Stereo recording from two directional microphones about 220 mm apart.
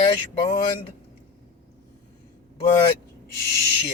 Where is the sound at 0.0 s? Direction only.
25° left (ahead or behind).